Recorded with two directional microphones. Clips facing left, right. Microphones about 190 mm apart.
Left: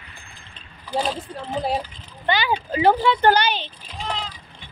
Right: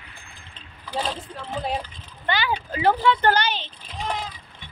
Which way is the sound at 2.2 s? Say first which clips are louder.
Left 3 dB; 15° left (ahead or behind).